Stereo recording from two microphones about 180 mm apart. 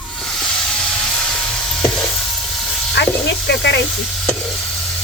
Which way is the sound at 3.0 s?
70° left (ahead or behind).